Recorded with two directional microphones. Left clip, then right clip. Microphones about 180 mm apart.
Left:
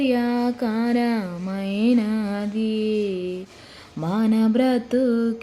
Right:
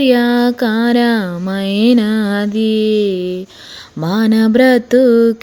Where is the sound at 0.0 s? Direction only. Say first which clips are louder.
Right 10 dB; 45° right (ahead or behind).